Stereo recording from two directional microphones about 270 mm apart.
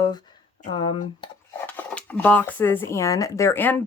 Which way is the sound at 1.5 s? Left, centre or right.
Centre.